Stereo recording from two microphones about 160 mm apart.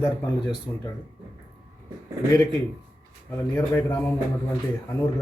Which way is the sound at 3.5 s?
10° left (ahead or behind).